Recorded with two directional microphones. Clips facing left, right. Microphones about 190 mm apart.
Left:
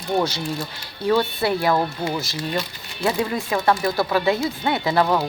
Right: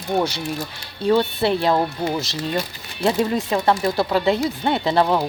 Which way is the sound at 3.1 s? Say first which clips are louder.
Right 3 dB; 20° right (ahead or behind).